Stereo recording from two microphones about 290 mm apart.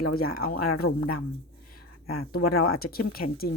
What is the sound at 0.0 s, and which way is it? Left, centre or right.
Speech, left.